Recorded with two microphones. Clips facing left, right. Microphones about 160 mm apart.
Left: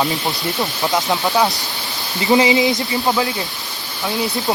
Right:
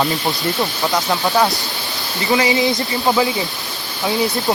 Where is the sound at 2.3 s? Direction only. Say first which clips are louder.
Left 3 dB; 20° left (ahead or behind).